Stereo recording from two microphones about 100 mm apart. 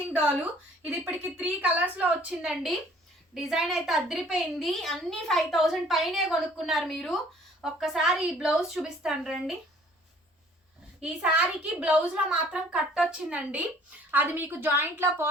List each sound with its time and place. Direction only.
0.1 s a child's voice: 15° right (ahead or behind)
11.0 s a child's voice: 10° right (ahead or behind)